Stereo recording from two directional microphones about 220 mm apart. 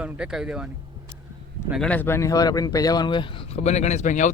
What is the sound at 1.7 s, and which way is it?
Speech, 5° left (ahead or behind).